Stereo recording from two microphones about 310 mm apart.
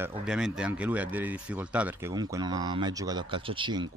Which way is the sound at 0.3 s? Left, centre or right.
Centre.